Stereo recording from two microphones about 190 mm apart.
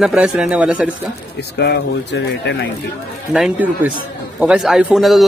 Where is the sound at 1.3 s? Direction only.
65° left (ahead or behind).